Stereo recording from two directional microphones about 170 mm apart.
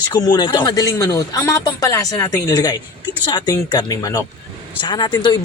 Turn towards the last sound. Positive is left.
turn(degrees=25)  # may be behind; listen again after turning